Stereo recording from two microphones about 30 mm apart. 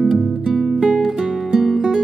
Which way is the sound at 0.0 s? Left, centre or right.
Centre.